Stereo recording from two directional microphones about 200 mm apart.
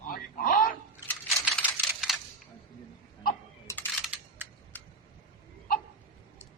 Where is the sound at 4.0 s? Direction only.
5° right (ahead or behind).